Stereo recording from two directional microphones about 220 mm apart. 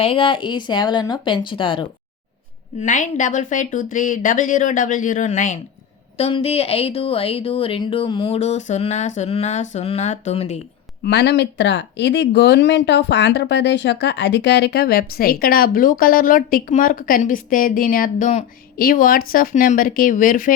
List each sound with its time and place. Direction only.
0.0 s speech: 25° left (ahead or behind)
2.8 s speech: 35° left (ahead or behind)
11.0 s speech: 50° left (ahead or behind)